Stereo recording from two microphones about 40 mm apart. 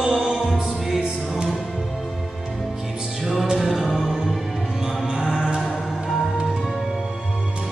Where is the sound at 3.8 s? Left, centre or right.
Centre.